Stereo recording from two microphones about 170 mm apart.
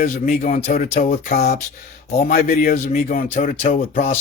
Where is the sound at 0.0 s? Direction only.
50° left (ahead or behind).